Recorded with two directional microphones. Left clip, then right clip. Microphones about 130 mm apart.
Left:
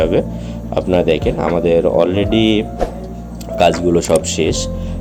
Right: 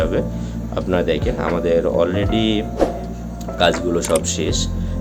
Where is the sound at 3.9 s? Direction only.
30° left (ahead or behind).